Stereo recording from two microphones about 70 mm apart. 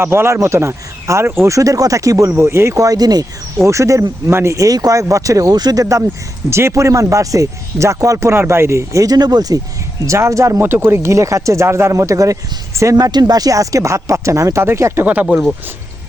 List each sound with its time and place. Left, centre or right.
0.0 s speech: right
1.5 s speech: right
2.4 s speech: right
3.7 s speech: right
6.5 s speech: right
8.3 s speech: right
9.1 s speech: right
10.1 s speech: right
10.6 s speech: right
13.0 s speech: right
15.0 s speech: right